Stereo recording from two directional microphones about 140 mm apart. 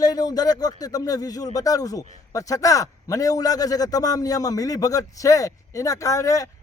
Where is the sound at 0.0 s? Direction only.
30° left (ahead or behind).